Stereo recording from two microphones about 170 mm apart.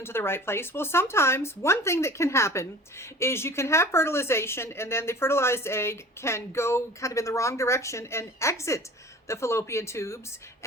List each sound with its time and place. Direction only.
0.0 s speech: 15° left (ahead or behind)